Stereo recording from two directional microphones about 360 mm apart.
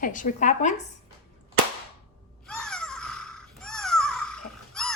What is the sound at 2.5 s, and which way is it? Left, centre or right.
Babbling, centre.